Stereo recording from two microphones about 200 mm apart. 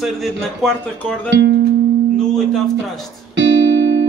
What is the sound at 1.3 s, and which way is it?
Speech, 60° right (ahead or behind).